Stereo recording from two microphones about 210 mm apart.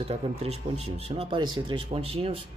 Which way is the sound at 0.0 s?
30° right (ahead or behind).